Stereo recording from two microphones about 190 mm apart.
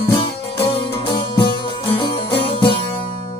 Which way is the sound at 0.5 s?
30° left (ahead or behind).